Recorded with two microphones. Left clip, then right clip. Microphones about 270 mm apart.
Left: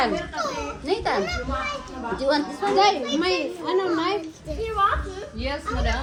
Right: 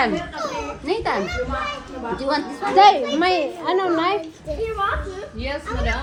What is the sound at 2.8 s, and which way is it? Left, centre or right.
A child's voice, centre.